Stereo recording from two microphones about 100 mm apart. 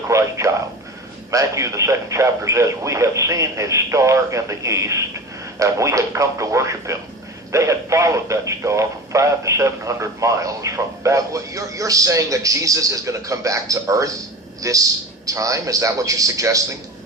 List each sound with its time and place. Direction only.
0.1 s a man's voice: 30° right (ahead or behind)